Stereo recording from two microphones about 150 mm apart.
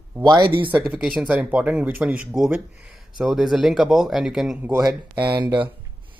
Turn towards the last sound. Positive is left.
turn(degrees=-30)  # may be behind; listen again after turning